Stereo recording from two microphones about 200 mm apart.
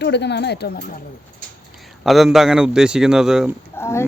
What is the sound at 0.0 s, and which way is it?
Speech, 60° left (ahead or behind).